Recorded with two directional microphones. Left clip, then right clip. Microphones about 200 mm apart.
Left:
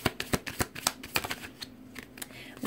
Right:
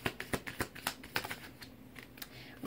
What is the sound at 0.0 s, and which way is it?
Shuffling cards, 35° left (ahead or behind).